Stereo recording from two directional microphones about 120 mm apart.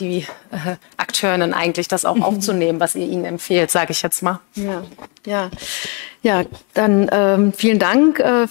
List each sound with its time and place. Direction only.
0.0 s speech: 20° left (ahead or behind)
1.9 s speech: 25° left (ahead or behind)